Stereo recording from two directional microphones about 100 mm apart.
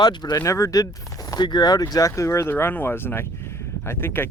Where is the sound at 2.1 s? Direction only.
30° left (ahead or behind).